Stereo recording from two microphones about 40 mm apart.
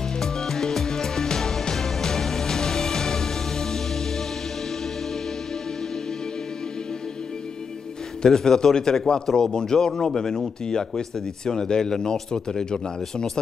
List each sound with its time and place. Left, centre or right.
0.2 s music: centre
8.2 s speech: centre